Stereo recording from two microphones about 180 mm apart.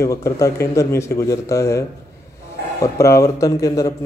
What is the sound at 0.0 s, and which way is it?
Speech, 15° left (ahead or behind).